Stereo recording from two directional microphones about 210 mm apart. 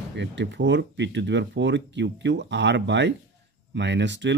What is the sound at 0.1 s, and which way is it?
Speech, 55° right (ahead or behind).